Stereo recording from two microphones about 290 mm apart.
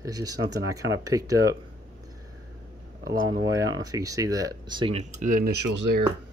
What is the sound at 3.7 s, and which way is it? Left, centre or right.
Speech, centre.